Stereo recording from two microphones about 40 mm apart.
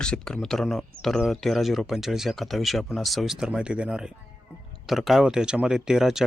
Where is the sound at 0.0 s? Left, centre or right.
Left.